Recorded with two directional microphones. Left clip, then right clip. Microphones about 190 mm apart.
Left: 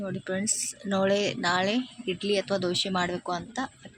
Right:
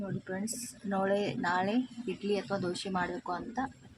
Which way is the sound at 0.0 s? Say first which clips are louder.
Left 7 dB; 15° left (ahead or behind).